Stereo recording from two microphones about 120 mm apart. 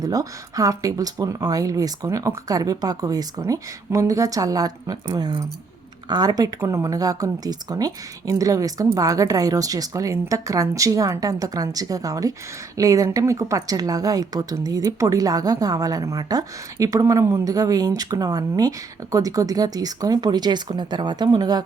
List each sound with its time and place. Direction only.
0.0 s a woman's voice: 30° right (ahead or behind)